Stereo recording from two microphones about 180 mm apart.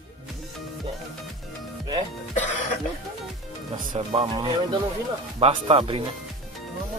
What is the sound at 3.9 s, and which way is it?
Speech, 30° right (ahead or behind).